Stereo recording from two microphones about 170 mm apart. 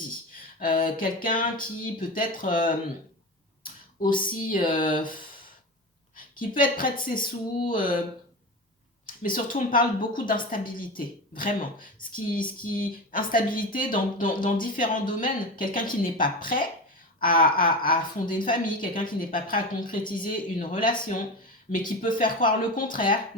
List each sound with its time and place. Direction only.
0.6 s a woman's voice: 55° left (ahead or behind)
4.3 s a woman's voice: 55° left (ahead or behind)
6.3 s a woman's voice: 55° left (ahead or behind)
9.0 s a woman's voice: 55° left (ahead or behind)